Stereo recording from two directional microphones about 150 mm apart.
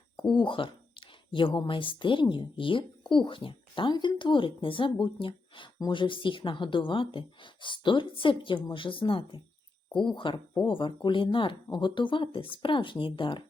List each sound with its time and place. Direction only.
0.2 s speech: 30° left (ahead or behind)